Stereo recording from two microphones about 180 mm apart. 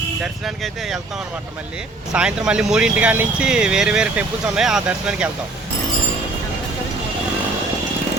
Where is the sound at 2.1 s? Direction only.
5° right (ahead or behind).